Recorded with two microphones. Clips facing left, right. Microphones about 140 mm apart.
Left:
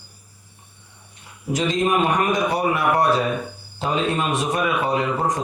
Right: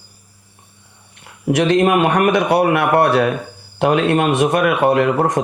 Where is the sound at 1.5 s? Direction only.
70° right (ahead or behind).